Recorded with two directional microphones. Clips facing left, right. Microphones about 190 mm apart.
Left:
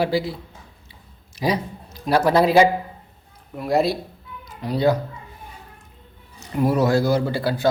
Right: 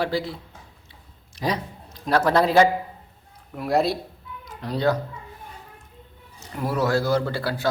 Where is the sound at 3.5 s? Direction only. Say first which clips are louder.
Left 2 dB; centre (ahead or behind).